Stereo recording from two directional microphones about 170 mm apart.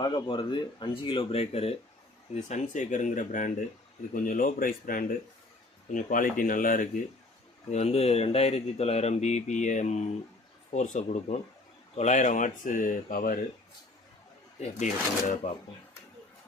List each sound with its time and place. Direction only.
0.0 s speech: 30° left (ahead or behind); by 6.8 s 50° left (ahead or behind)
7.7 s speech: 40° left (ahead or behind); by 13.4 s 55° left (ahead or behind)
14.6 s speech: 45° left (ahead or behind)